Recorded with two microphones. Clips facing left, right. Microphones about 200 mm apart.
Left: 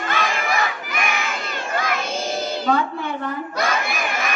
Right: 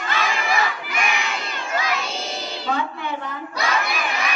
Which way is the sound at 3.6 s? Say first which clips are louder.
Even; 50° left (ahead or behind).